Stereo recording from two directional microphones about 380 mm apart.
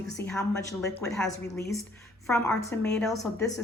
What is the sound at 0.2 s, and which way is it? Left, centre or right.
A woman's voice, centre.